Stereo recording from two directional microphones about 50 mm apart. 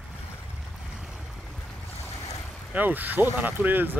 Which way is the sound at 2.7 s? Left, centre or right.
Right.